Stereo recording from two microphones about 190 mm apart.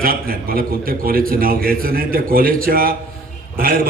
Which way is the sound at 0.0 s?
50° right (ahead or behind).